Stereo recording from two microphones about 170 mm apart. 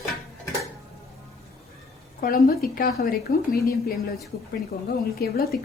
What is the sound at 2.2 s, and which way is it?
Speech, 60° left (ahead or behind).